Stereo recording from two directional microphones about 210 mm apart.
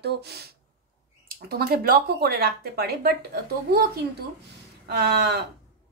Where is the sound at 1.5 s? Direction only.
45° right (ahead or behind).